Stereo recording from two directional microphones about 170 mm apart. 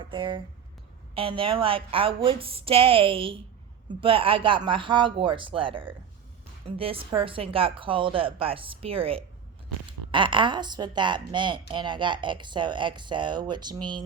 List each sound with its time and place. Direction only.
0.0 s a woman's voice: 30° right (ahead or behind)